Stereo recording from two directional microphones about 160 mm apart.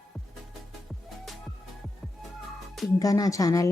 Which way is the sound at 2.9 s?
20° left (ahead or behind).